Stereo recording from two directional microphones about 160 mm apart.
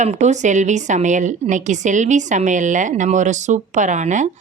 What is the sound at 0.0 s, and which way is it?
Speech, 50° right (ahead or behind).